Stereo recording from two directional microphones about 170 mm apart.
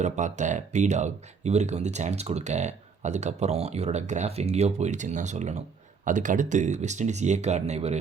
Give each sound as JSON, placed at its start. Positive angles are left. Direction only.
{"t": 0.0, "sound": "speech", "side_deg": -45}